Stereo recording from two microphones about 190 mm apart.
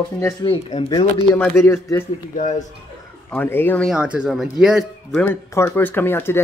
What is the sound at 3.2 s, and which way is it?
Speech, 10° left (ahead or behind).